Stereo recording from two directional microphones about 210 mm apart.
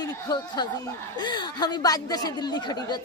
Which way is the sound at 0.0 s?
20° left (ahead or behind).